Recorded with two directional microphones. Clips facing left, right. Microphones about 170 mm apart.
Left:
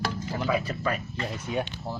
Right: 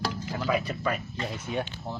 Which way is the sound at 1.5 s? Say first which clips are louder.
Left 2 dB; 10° left (ahead or behind).